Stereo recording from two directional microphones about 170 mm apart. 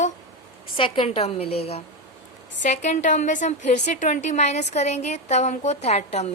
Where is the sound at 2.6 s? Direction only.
45° left (ahead or behind).